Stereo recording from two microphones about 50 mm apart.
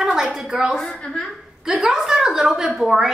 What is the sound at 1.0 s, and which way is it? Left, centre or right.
Speech, centre.